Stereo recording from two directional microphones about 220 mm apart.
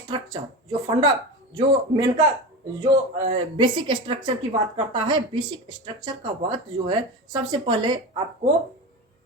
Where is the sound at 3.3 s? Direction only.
20° right (ahead or behind).